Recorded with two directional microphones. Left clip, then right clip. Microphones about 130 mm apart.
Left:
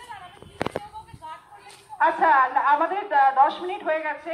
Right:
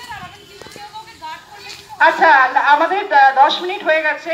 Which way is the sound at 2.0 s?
45° right (ahead or behind).